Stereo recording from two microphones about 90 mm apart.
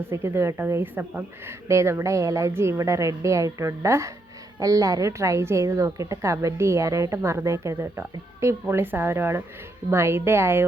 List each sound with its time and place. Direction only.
0.1 s a woman's voice: 30° right (ahead or behind)